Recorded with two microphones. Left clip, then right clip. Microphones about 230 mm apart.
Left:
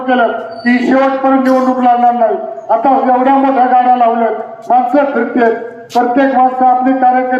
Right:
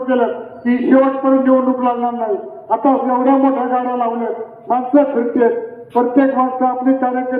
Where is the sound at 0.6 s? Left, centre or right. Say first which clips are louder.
Left 2 dB; left.